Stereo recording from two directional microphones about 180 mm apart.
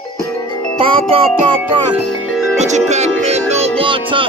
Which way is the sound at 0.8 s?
30° right (ahead or behind).